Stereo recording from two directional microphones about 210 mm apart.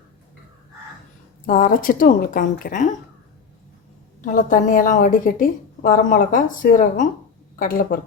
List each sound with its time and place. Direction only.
1.5 s a woman's voice: 40° left (ahead or behind)
4.2 s a woman's voice: 35° left (ahead or behind)